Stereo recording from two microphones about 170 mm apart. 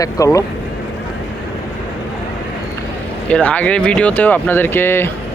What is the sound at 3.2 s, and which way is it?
Speech, 10° left (ahead or behind).